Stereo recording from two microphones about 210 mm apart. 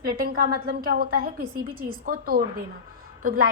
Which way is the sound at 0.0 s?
45° right (ahead or behind).